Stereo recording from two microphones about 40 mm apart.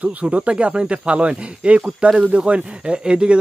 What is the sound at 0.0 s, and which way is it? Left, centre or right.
Speech, right.